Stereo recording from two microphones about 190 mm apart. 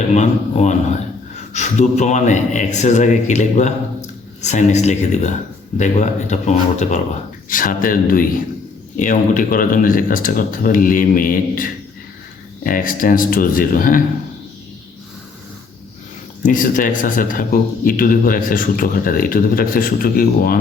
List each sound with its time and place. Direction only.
0.1 s a sound: 35° left (ahead or behind)
1.5 s a man's voice: 40° left (ahead or behind)
16.4 s speech: 45° left (ahead or behind)